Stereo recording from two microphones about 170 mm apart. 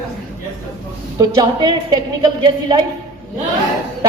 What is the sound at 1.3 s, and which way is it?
A woman's voice, 25° right (ahead or behind).